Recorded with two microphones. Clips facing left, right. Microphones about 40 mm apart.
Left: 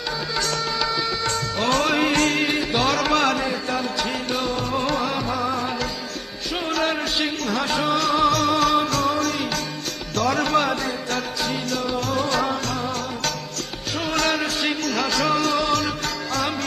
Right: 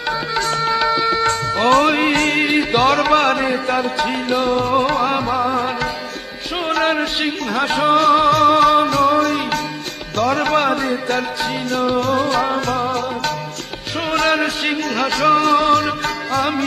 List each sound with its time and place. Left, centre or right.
0.3 s music: right
14.1 s music: right